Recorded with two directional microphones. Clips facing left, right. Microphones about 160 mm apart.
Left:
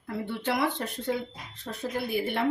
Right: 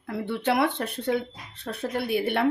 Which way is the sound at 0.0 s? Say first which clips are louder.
Right 4 dB; 70° right (ahead or behind).